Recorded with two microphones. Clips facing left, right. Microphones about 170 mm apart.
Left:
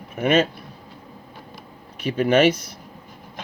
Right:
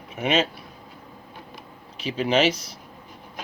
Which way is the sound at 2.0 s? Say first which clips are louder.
Left 4 dB; 55° left (ahead or behind).